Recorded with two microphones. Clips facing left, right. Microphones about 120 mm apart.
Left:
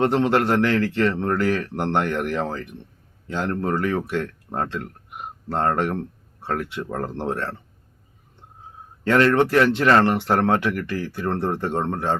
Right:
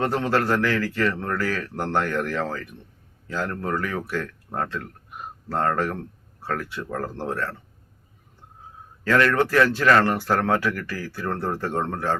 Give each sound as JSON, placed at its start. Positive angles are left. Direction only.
{"t": 0.0, "sound": "speech", "side_deg": 25}
{"t": 9.0, "sound": "speech", "side_deg": 25}